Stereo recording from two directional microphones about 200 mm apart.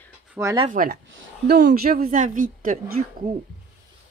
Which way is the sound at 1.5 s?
45° right (ahead or behind).